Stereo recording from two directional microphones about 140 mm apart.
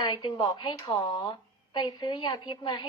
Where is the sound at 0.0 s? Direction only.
30° left (ahead or behind).